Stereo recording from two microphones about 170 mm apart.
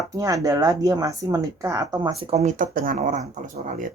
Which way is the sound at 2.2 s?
40° right (ahead or behind).